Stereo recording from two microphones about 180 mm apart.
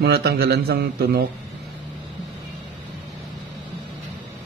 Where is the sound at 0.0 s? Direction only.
65° right (ahead or behind).